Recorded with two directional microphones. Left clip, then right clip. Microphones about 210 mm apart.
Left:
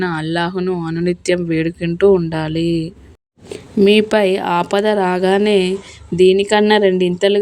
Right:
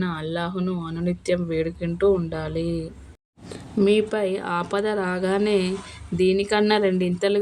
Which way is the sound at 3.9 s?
40° left (ahead or behind).